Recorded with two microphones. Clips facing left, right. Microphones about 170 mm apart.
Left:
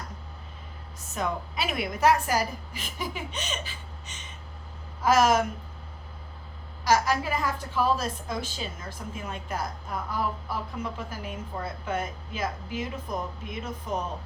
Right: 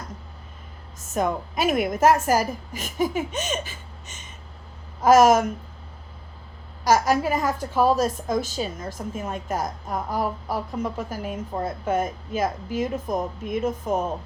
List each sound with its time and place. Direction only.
1.1 s a woman's voice: 45° right (ahead or behind)
6.8 s a woman's voice: 45° right (ahead or behind)